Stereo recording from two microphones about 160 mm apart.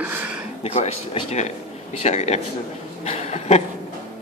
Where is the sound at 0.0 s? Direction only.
10° right (ahead or behind).